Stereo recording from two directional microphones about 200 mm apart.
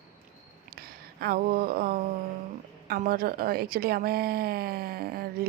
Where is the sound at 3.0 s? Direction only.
45° right (ahead or behind).